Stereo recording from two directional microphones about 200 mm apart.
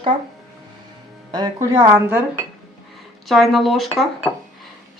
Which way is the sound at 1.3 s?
20° right (ahead or behind).